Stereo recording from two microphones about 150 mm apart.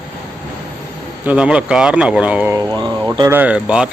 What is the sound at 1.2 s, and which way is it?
Speech, 5° right (ahead or behind).